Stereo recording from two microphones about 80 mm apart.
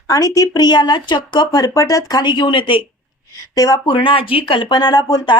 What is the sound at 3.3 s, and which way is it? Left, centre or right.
Speech, left.